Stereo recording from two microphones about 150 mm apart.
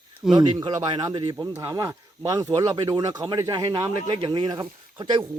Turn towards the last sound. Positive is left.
turn(degrees=-30)  # may be behind; listen again after turning